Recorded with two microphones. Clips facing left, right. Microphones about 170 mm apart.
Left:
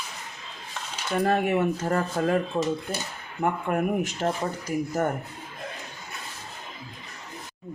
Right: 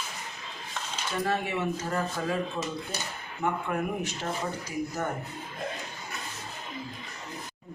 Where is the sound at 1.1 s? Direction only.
55° left (ahead or behind).